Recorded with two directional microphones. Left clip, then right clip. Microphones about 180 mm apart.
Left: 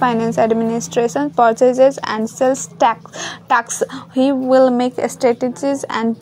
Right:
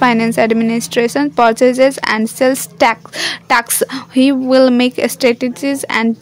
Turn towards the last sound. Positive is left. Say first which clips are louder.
# right 3 dB
turn(degrees=-25)  # may be behind; listen again after turning